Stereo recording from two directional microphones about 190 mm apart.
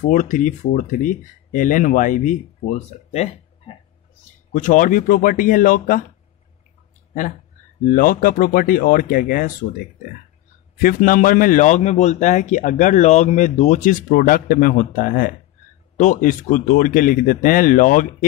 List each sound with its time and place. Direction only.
0.1 s a man's voice: 40° left (ahead or behind)
7.8 s speech: 45° left (ahead or behind)
10.8 s a man's voice: 45° left (ahead or behind)